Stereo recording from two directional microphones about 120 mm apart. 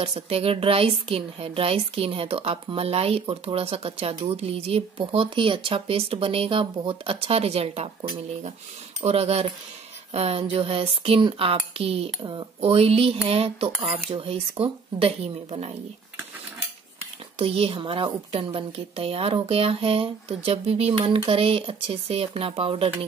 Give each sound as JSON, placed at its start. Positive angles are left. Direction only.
{"t": 0.0, "sound": "a woman's voice", "side_deg": -55}
{"t": 9.0, "sound": "a woman's voice", "side_deg": -60}
{"t": 12.2, "sound": "speech", "side_deg": -35}
{"t": 12.5, "sound": "a woman's voice", "side_deg": -55}
{"t": 17.4, "sound": "a woman's voice", "side_deg": -45}